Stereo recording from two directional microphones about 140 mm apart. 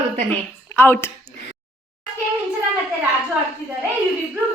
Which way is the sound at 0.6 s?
15° left (ahead or behind).